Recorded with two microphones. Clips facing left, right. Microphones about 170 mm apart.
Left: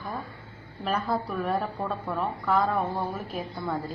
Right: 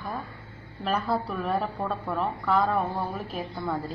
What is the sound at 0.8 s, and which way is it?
Speech, centre (ahead or behind).